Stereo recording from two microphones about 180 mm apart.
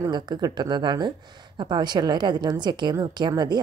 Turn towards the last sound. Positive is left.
turn(degrees=-25)  # may be behind; listen again after turning